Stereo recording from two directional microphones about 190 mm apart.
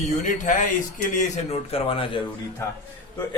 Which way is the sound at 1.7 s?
30° left (ahead or behind).